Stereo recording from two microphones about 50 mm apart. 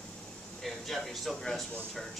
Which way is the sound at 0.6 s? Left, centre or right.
Centre.